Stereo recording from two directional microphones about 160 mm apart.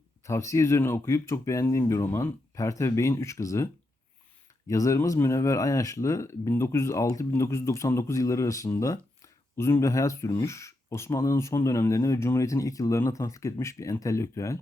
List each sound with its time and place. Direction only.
0.3 s speech: 20° left (ahead or behind)
4.7 s speech: 20° left (ahead or behind)